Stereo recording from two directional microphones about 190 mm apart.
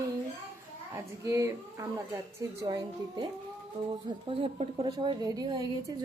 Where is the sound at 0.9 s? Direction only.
15° right (ahead or behind).